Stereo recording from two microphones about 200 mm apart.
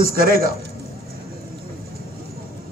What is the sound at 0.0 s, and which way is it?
Speech, 45° right (ahead or behind).